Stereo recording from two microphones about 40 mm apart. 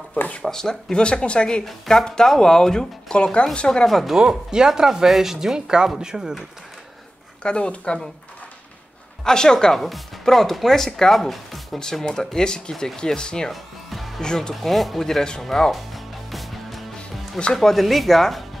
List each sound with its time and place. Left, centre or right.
0.4 s speech: centre
1.9 s speech: centre
3.2 s speech: left
3.8 s speech: centre
4.2 s speech: centre
7.4 s speech: left
9.2 s speech: centre
9.8 s speech: centre
11.8 s speech: centre
13.5 s music: centre
14.2 s speech: centre
14.5 s speech: centre
15.7 s music: centre
17.6 s speech: centre